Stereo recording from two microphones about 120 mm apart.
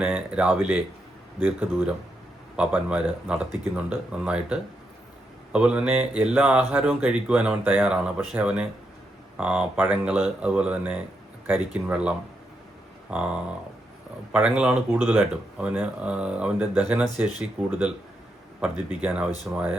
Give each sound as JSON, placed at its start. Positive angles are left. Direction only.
{"t": 0.0, "sound": "speech", "side_deg": -10}